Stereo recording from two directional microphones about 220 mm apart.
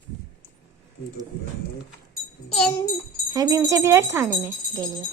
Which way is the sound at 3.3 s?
15° right (ahead or behind).